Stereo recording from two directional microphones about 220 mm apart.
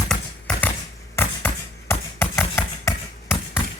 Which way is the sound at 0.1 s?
5° left (ahead or behind).